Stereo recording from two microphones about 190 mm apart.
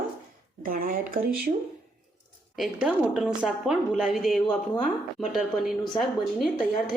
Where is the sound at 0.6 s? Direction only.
45° right (ahead or behind).